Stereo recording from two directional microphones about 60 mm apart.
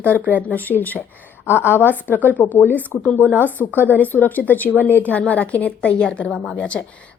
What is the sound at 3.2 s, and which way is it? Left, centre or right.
Speech, right.